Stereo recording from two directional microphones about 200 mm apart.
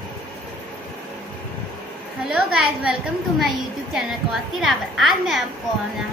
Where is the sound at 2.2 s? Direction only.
Centre (ahead or behind).